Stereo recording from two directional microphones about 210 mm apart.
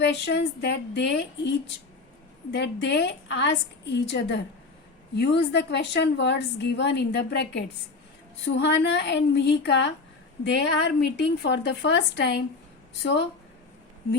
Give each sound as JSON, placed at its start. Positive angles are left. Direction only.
{"t": 0.0, "sound": "a woman's voice", "side_deg": 55}